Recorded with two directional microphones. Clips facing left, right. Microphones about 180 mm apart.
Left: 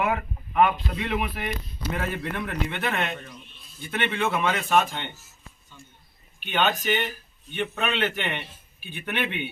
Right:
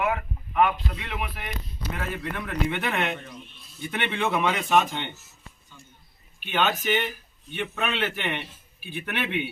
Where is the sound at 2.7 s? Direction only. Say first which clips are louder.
Right 1 dB; 15° right (ahead or behind).